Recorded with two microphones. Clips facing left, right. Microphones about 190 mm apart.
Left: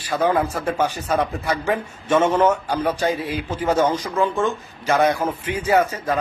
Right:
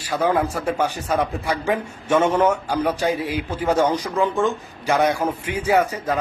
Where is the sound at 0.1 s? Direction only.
10° right (ahead or behind).